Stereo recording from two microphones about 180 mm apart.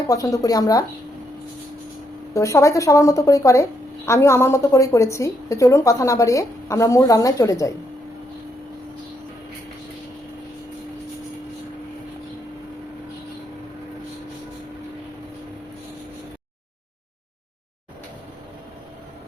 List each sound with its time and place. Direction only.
0.1 s speech: 20° left (ahead or behind)
2.3 s a woman's voice: 15° left (ahead or behind)